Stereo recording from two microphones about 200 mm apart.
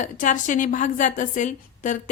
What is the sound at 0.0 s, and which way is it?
A woman's voice, 40° left (ahead or behind).